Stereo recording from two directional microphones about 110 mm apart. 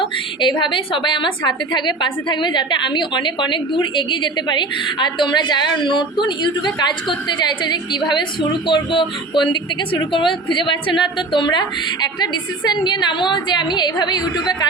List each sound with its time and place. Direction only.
0.4 s a woman's voice: 45° left (ahead or behind)